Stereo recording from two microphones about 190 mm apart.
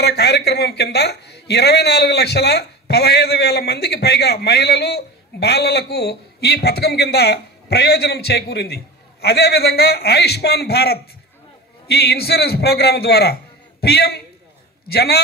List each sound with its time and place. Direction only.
0.0 s speech: 60° left (ahead or behind)